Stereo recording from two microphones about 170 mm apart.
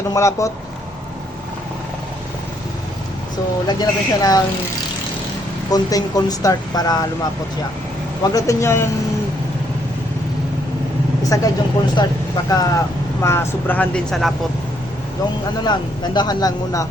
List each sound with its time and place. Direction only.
0.1 s speech: 20° left (ahead or behind)
3.7 s speech: 25° left (ahead or behind)
5.7 s speech: 20° left (ahead or behind)
8.2 s speech: 20° left (ahead or behind)
11.3 s speech: 20° left (ahead or behind); by 14.3 s centre (ahead or behind)
15.6 s speech: 25° left (ahead or behind)